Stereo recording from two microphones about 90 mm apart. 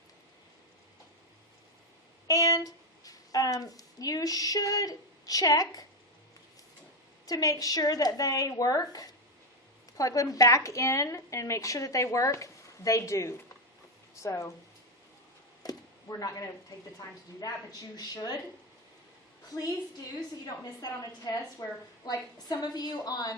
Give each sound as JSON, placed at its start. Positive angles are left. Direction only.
{"t": 2.2, "sound": "a woman's voice", "side_deg": 40}
{"t": 7.3, "sound": "a woman's voice", "side_deg": 45}
{"t": 15.6, "sound": "a sound", "side_deg": 40}
{"t": 17.4, "sound": "a woman's voice", "side_deg": 45}
{"t": 20.8, "sound": "a woman's voice", "side_deg": 45}